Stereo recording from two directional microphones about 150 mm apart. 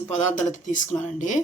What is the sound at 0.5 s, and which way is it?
Speech, 55° left (ahead or behind).